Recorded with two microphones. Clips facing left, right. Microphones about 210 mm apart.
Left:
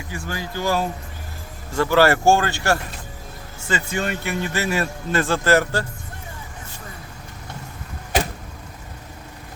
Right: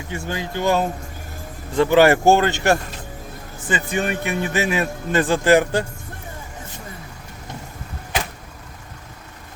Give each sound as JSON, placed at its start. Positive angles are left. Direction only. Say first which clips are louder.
{"t": 0.1, "sound": "a man's voice", "louder": "right 3 dB", "side_deg": -25}